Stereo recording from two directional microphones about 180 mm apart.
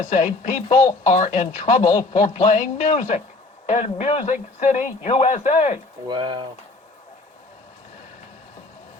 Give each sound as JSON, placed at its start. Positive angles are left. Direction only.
{"t": 0.0, "sound": "a woman's voice", "side_deg": 40}
{"t": 6.1, "sound": "speech", "side_deg": -25}